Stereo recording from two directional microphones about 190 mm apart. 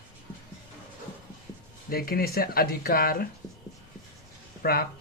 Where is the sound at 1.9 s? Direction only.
50° left (ahead or behind).